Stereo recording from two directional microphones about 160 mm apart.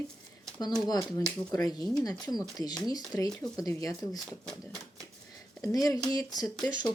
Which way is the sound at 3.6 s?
20° left (ahead or behind).